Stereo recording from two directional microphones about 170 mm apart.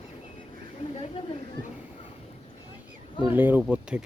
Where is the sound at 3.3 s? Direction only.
10° right (ahead or behind).